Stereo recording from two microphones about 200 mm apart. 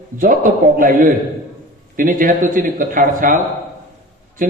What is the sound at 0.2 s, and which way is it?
A man's voice, 45° right (ahead or behind).